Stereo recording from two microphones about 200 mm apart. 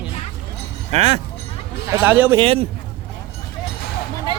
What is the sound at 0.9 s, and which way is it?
Speech, 30° right (ahead or behind).